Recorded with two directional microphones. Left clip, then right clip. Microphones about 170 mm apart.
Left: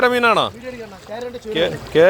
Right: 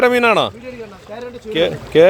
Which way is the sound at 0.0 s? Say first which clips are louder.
Right 2 dB; 45° right (ahead or behind).